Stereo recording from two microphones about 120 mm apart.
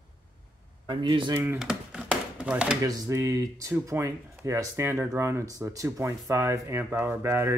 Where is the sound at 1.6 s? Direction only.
5° right (ahead or behind).